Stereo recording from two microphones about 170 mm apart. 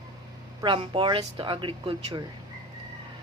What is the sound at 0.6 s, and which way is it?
Speech, 30° right (ahead or behind).